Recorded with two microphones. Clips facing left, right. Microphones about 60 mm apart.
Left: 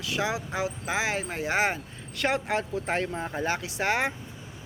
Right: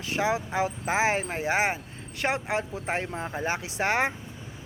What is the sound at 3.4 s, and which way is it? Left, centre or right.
Speech, right.